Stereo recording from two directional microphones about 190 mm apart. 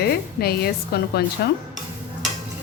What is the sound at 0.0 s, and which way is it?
A woman's voice, 55° left (ahead or behind).